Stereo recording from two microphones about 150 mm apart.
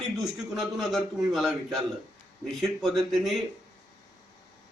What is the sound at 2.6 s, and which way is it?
Speech, centre (ahead or behind).